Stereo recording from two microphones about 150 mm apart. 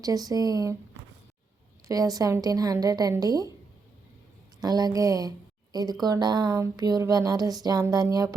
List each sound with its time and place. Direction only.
0.0 s speech: 25° right (ahead or behind)
1.9 s speech: 25° right (ahead or behind)
4.6 s speech: 25° right (ahead or behind)